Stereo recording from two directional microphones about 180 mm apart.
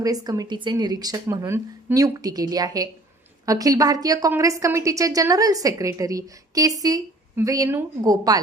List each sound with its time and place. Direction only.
0.0 s a woman's voice: 20° right (ahead or behind)